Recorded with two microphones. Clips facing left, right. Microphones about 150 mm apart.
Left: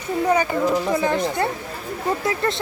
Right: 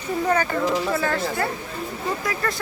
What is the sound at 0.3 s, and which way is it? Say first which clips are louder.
Speech: left 3 dB; 10° left (ahead or behind).